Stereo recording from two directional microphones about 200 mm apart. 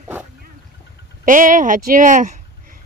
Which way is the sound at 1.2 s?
40° right (ahead or behind).